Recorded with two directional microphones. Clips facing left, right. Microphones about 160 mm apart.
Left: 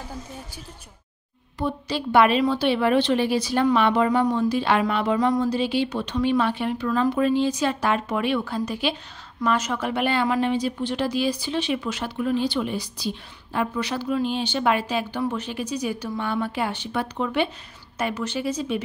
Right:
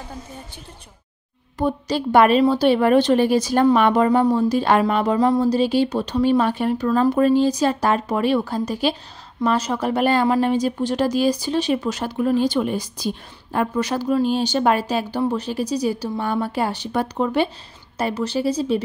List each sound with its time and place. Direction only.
1.6 s speech: 45° right (ahead or behind)